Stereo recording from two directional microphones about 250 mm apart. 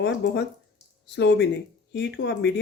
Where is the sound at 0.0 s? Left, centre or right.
Left.